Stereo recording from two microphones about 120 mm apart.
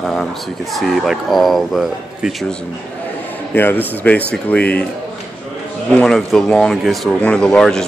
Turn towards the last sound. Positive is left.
turn(degrees=5)  # may be behind; listen again after turning